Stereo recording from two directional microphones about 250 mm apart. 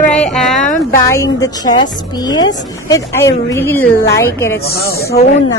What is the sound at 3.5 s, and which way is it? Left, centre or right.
Speech, centre.